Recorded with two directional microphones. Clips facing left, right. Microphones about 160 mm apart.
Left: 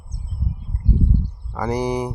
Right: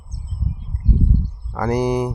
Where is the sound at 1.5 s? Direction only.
10° left (ahead or behind).